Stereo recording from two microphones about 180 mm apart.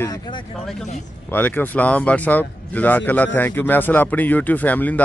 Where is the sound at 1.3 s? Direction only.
10° left (ahead or behind).